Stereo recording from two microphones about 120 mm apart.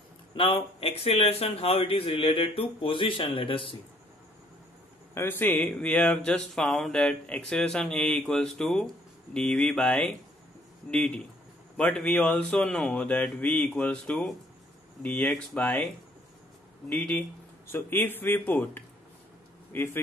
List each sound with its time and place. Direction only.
0.3 s speech: 45° left (ahead or behind)
5.1 s speech: 20° left (ahead or behind)
16.9 s speech: 10° left (ahead or behind)
17.6 s speech: 20° left (ahead or behind)